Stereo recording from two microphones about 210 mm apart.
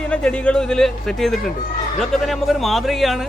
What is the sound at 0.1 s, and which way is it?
Speech, 5° left (ahead or behind).